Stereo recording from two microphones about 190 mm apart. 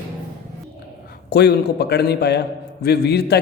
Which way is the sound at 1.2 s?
60° left (ahead or behind).